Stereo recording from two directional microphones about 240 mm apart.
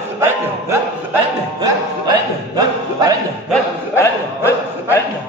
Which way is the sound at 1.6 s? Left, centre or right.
Centre.